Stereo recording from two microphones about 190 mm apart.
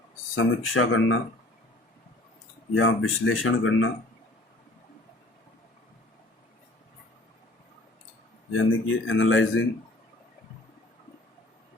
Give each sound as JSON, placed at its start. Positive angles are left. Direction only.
{"t": 0.3, "sound": "speech", "side_deg": 90}
{"t": 2.7, "sound": "speech", "side_deg": 90}
{"t": 8.5, "sound": "speech", "side_deg": 85}